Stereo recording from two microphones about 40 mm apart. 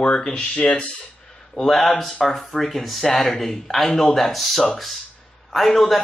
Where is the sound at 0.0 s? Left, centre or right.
Left.